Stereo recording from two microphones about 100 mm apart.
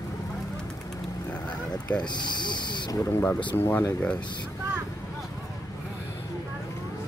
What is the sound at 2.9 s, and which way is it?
Speech, 30° left (ahead or behind).